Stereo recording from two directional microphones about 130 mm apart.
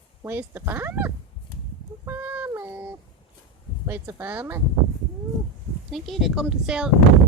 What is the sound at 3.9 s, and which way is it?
Speech, 15° right (ahead or behind).